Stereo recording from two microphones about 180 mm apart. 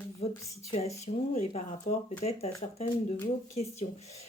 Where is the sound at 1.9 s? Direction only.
45° left (ahead or behind).